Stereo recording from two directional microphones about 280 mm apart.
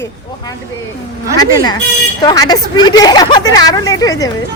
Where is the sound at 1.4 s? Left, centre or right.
Centre.